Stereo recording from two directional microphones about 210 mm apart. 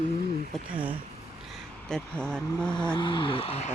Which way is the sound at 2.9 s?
20° left (ahead or behind).